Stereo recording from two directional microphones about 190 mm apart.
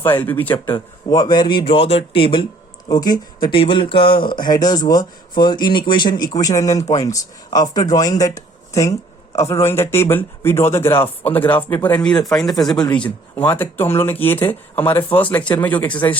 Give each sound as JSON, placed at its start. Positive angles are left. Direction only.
{"t": 0.3, "sound": "speech", "side_deg": 10}